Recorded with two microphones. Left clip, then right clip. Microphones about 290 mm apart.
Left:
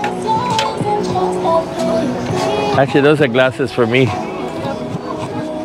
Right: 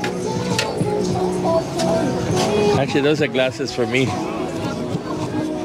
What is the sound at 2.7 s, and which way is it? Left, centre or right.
Speech, left.